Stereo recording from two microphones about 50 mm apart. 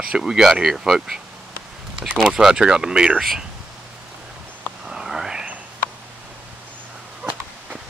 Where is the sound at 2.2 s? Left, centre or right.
Centre.